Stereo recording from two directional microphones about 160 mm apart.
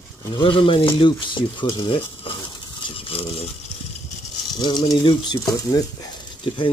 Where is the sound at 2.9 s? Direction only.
35° left (ahead or behind).